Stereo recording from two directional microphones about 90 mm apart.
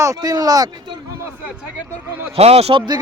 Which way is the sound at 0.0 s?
40° right (ahead or behind).